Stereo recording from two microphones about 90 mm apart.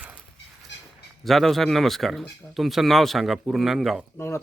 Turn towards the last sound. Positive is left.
turn(degrees=30)  # may be behind; listen again after turning